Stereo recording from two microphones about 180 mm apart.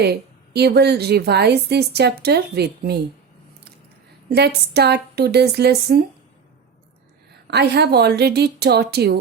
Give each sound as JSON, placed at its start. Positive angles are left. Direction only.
{"t": 0.0, "sound": "a woman's voice", "side_deg": -65}
{"t": 4.3, "sound": "a woman's voice", "side_deg": -65}
{"t": 7.4, "sound": "a woman's voice", "side_deg": -65}